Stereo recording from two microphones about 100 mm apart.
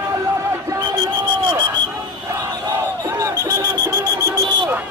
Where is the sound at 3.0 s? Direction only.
30° right (ahead or behind).